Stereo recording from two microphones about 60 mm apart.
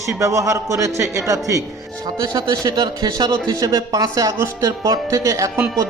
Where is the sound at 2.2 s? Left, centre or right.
Right.